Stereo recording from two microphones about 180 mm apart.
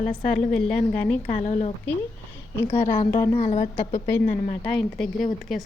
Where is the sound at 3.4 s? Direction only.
35° left (ahead or behind).